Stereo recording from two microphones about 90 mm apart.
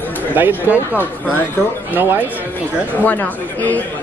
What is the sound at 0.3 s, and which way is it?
Speech, 20° right (ahead or behind).